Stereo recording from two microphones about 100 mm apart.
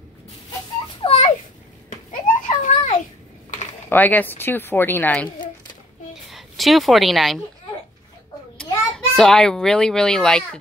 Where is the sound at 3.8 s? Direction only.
15° left (ahead or behind).